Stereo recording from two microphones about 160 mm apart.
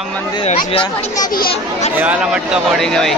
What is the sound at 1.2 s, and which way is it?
Speech, 65° left (ahead or behind).